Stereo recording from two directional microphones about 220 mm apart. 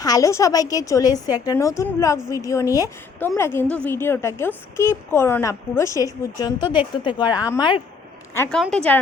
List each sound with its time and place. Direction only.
0.0 s a woman's voice: 15° left (ahead or behind)
8.4 s a woman's voice: 5° left (ahead or behind)